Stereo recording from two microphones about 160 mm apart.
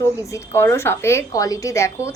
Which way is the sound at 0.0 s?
20° left (ahead or behind).